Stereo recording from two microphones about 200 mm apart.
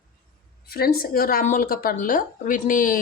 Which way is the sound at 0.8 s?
45° left (ahead or behind).